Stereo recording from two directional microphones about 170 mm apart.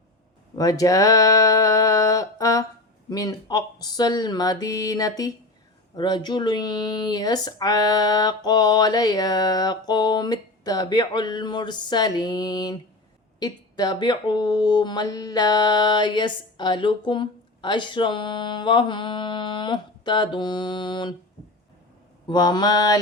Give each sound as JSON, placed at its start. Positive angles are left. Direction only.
{"t": 0.5, "sound": "a sound", "side_deg": 20}
{"t": 3.1, "sound": "speech", "side_deg": 20}
{"t": 22.3, "sound": "speech", "side_deg": 25}